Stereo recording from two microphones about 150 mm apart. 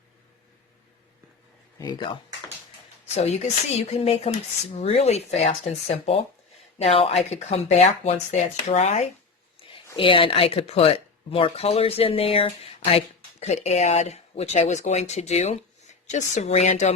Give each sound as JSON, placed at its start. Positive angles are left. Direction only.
{"t": 1.8, "sound": "speech", "side_deg": 30}
{"t": 3.2, "sound": "speech", "side_deg": 45}